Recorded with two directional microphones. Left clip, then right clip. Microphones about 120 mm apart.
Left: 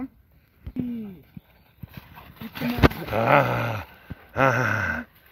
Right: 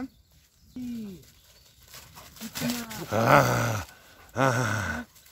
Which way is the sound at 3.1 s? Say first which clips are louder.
Right 2 dB; 90° right.